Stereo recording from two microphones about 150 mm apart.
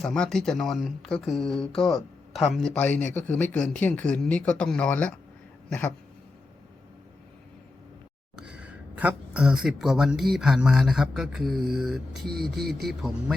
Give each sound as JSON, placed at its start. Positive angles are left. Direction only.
{"t": 0.0, "sound": "speech", "side_deg": 5}
{"t": 8.4, "sound": "a sound", "side_deg": -5}
{"t": 10.3, "sound": "speech", "side_deg": -5}